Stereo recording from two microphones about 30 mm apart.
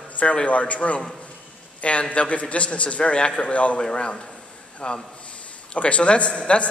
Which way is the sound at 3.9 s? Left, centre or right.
Left.